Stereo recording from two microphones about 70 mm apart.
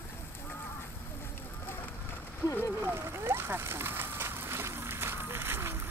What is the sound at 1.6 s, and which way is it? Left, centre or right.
Run, left.